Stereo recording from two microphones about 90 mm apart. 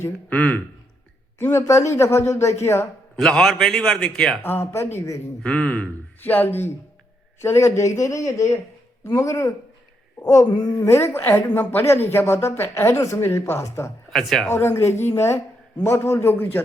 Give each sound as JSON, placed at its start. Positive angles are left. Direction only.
{"t": 0.3, "sound": "speech", "side_deg": 15}
{"t": 1.4, "sound": "speech", "side_deg": 25}
{"t": 3.2, "sound": "speech", "side_deg": 5}
{"t": 4.4, "sound": "speech", "side_deg": 25}
{"t": 5.4, "sound": "speech", "side_deg": 10}
{"t": 10.4, "sound": "speech", "side_deg": 55}
{"t": 10.8, "sound": "speech", "side_deg": 30}
{"t": 14.1, "sound": "speech", "side_deg": 5}
{"t": 14.4, "sound": "speech", "side_deg": 25}